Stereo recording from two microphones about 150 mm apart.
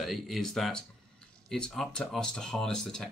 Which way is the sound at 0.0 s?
Centre (ahead or behind).